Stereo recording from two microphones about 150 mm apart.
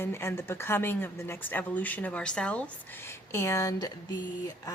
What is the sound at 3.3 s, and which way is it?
Speech, 20° left (ahead or behind).